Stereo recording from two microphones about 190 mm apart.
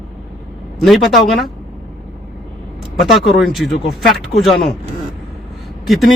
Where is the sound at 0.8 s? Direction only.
Centre (ahead or behind).